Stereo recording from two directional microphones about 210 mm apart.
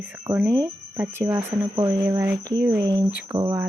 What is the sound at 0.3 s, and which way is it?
Speech, 15° right (ahead or behind).